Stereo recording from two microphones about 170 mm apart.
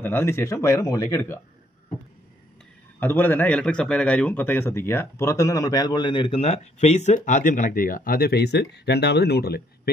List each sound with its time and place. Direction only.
0.0 s speech: 15° left (ahead or behind)
3.0 s a man's voice: 10° left (ahead or behind); by 9.6 s 65° left (ahead or behind)